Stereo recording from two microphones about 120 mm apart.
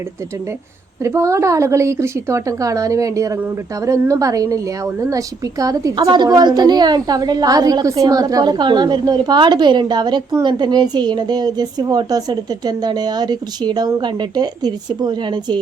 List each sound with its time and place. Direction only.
1.0 s a woman's voice: 25° right (ahead or behind)